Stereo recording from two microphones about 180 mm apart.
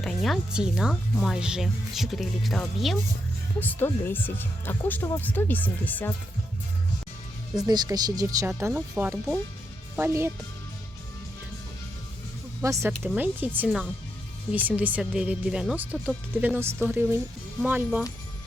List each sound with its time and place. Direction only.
0.0 s speech: centre (ahead or behind)
3.6 s speech: 10° left (ahead or behind)
7.7 s speech: 20° right (ahead or behind)
12.6 s speech: 15° right (ahead or behind)